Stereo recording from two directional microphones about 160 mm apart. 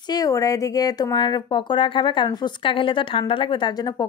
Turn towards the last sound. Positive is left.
turn(degrees=30)  # may be behind; listen again after turning